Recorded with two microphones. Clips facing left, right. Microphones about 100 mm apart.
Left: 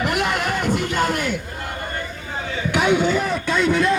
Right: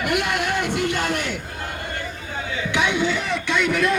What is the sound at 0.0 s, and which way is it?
Music, 35° left (ahead or behind).